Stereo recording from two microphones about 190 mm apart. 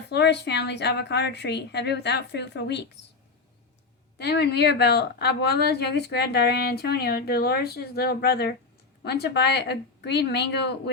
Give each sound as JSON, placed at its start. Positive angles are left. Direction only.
{"t": 0.1, "sound": "speech", "side_deg": 65}
{"t": 4.2, "sound": "speech", "side_deg": 60}